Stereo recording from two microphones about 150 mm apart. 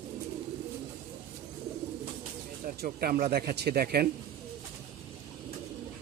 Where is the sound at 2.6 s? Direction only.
80° right.